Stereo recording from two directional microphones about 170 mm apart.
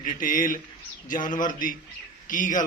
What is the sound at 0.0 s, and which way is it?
A man's voice, 50° left (ahead or behind).